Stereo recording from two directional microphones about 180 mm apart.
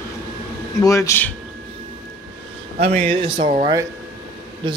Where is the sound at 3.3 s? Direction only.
35° right (ahead or behind).